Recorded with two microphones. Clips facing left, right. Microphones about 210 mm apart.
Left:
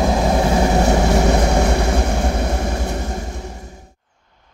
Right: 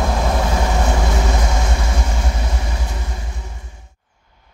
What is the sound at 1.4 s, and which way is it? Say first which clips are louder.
Vehicle: left 7 dB; 60° left (ahead or behind).